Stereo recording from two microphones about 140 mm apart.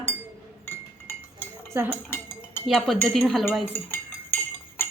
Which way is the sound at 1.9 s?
15° left (ahead or behind).